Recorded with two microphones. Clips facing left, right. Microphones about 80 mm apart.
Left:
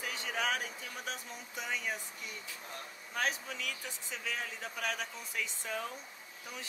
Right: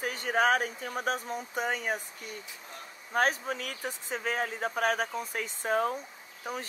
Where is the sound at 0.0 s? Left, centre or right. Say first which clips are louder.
Right 9 dB; right.